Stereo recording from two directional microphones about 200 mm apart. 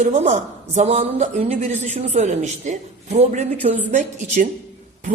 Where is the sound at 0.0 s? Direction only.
35° right (ahead or behind).